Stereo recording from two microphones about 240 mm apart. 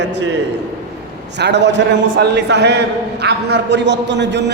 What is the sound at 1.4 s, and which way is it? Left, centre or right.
A man's voice, right.